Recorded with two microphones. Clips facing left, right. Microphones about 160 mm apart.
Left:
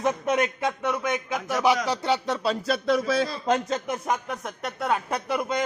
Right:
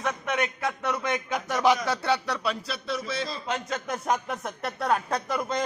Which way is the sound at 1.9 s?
20° left (ahead or behind).